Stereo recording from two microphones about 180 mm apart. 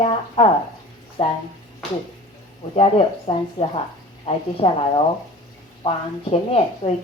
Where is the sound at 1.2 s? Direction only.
35° left (ahead or behind).